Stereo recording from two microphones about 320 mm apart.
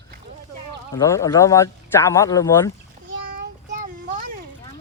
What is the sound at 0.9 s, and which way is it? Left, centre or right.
Speech, centre.